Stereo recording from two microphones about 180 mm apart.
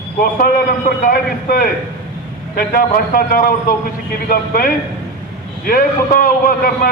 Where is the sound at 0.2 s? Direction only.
50° left (ahead or behind).